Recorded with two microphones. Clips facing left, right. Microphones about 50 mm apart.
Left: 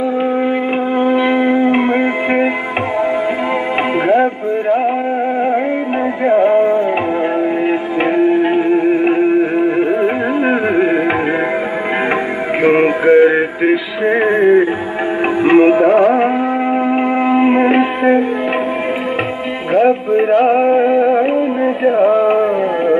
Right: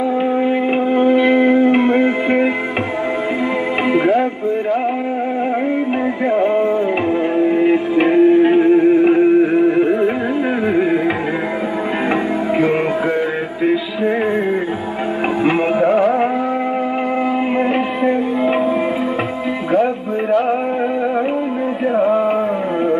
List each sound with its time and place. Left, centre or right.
0.2 s music: centre
3.9 s music: left
6.2 s music: left
7.3 s music: centre
8.6 s music: left
12.6 s music: left
15.5 s music: left
17.3 s music: left
19.7 s music: left